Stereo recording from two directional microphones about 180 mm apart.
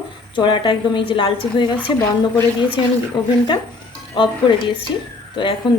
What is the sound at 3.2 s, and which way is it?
A woman's voice, 25° left (ahead or behind).